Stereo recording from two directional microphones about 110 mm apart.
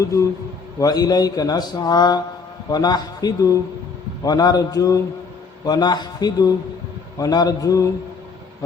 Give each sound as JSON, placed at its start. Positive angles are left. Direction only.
{"t": 0.0, "sound": "a man's voice", "side_deg": 30}